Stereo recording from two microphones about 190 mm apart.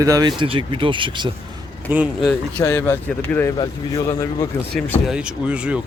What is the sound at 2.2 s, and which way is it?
Speech, 10° left (ahead or behind).